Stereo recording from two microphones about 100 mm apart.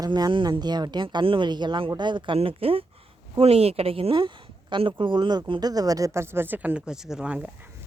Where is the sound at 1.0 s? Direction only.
60° right (ahead or behind).